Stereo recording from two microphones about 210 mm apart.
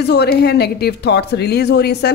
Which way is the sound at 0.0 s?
50° left (ahead or behind).